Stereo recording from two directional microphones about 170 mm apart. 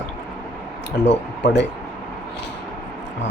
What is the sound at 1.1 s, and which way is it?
Speech, 90° left.